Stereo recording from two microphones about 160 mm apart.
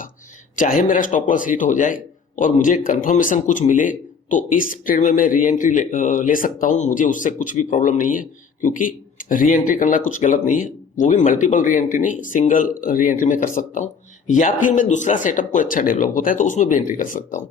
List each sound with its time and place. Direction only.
0.5 s a man's voice: 55° left (ahead or behind)